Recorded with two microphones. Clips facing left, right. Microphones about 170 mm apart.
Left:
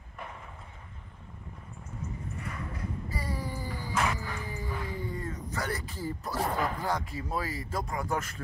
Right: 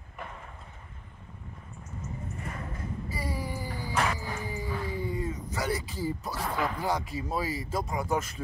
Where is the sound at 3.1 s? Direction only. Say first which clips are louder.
Right 2 dB; 10° right (ahead or behind).